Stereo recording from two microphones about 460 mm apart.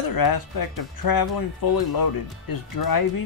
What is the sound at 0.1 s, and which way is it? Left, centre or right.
Speech, left.